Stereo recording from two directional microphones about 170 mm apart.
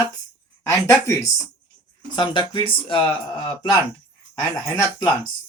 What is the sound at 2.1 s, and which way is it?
Speech, 30° left (ahead or behind).